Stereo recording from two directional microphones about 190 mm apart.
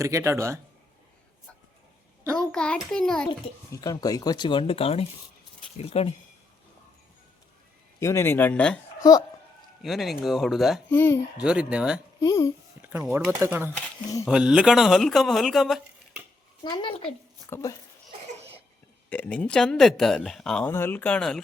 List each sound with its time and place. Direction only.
0.0 s speech: 15° right (ahead or behind)
2.5 s speech: 5° left (ahead or behind)
3.2 s speech: 20° left (ahead or behind)
7.9 s speech: 15° left (ahead or behind)
9.0 s speech: 20° left (ahead or behind)
9.8 s speech: centre (ahead or behind)
10.9 s speech: 10° left (ahead or behind)
11.3 s speech: 5° right (ahead or behind)
12.2 s speech: 20° left (ahead or behind)
12.8 s speech: 10° right (ahead or behind)
16.6 s speech: 25° left (ahead or behind)
19.1 s speech: 5° left (ahead or behind)